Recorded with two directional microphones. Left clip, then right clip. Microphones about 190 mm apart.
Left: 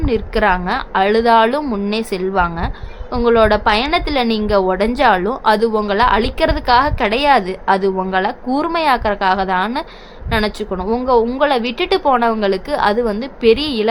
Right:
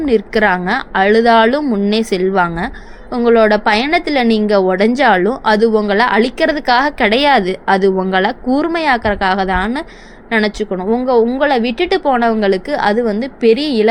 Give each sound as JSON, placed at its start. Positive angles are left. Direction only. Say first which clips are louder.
{"t": 0.0, "sound": "a woman's voice", "louder": "right 3 dB", "side_deg": -15}